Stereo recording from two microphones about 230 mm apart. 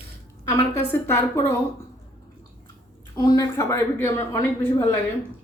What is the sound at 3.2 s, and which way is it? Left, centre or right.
A woman's voice, centre.